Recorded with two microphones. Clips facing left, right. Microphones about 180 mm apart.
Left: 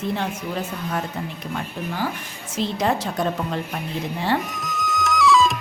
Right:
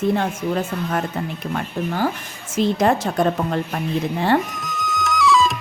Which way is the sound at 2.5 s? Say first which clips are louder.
Right 5 dB; 50° right (ahead or behind).